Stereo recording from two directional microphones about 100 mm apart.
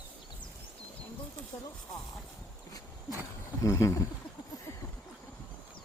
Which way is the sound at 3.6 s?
30° left (ahead or behind).